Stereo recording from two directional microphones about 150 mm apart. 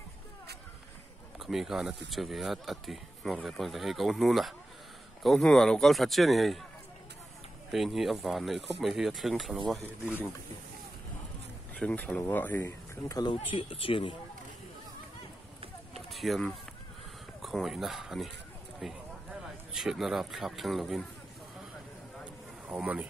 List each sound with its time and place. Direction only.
1.4 s speech: centre (ahead or behind)
7.7 s speech: centre (ahead or behind)
11.7 s speech: 10° left (ahead or behind)
13.2 s speech: 35° left (ahead or behind)
16.1 s a man's voice: centre (ahead or behind)
22.2 s a sound: 10° right (ahead or behind)